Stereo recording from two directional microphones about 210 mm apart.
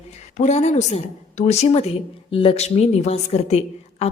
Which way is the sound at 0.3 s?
35° left (ahead or behind).